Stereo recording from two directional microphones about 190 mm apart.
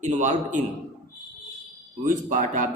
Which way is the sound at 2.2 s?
40° right (ahead or behind).